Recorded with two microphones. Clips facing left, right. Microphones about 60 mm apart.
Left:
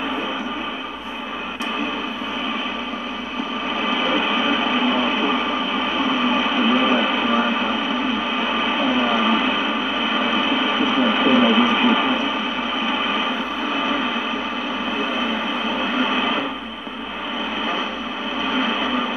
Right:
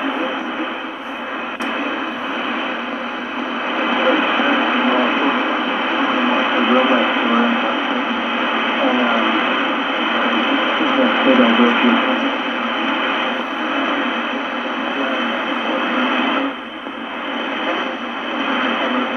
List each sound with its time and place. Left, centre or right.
3.9 s radio: right
16.0 s radio: right